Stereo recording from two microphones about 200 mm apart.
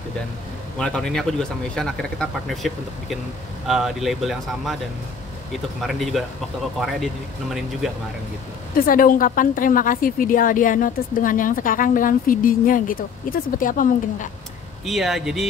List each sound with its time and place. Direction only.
0.7 s speech: 5° left (ahead or behind)
5.8 s speech: centre (ahead or behind)
8.7 s a woman's voice: 45° left (ahead or behind)
14.9 s speech: centre (ahead or behind)